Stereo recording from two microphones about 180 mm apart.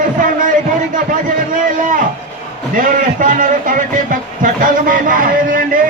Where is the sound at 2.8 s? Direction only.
50° right (ahead or behind).